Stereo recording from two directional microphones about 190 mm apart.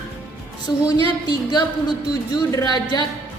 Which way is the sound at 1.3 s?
20° left (ahead or behind).